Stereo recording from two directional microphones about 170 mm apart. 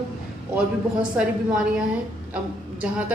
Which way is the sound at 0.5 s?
5° right (ahead or behind).